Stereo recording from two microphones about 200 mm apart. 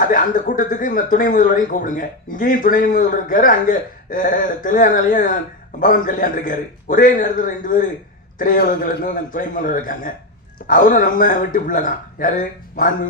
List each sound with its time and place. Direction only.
0.1 s speech: 40° left (ahead or behind)